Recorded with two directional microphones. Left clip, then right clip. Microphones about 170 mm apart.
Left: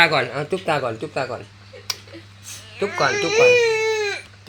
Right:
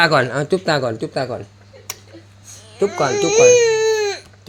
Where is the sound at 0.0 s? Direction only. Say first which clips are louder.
Right 2 dB; 90° right.